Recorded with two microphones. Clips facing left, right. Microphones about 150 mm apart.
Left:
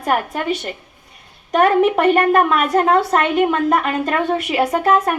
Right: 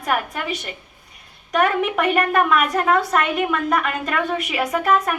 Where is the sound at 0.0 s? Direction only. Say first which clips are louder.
Left 4 dB; 30° left (ahead or behind).